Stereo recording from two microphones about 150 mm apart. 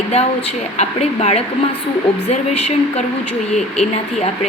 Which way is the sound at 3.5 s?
50° left (ahead or behind).